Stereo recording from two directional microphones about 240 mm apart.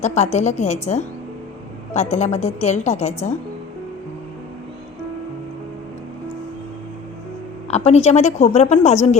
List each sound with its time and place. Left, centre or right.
0.0 s a woman's voice: left
7.7 s a woman's voice: left